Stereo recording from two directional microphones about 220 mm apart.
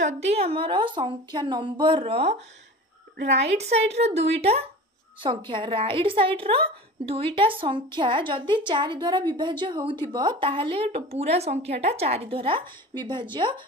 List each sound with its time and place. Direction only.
0.0 s a woman's voice: 30° right (ahead or behind)